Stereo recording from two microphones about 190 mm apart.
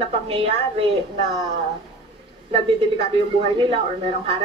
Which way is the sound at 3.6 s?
30° right (ahead or behind).